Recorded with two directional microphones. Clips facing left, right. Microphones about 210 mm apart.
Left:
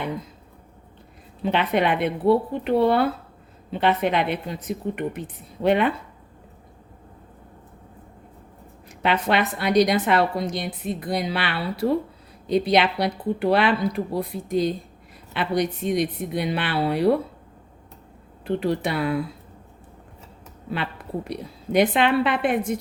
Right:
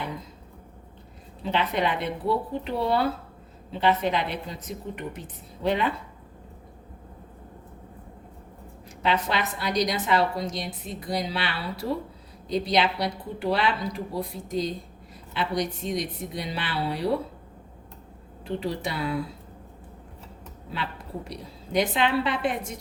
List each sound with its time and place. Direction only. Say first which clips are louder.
1.5 s a woman's voice: left 4 dB; 60° left (ahead or behind)
9.0 s a woman's voice: left 4 dB; 60° left (ahead or behind)
18.4 s a woman's voice: left 6 dB; 60° left (ahead or behind)
21.2 s a woman's voice: left 7 dB; 60° left (ahead or behind)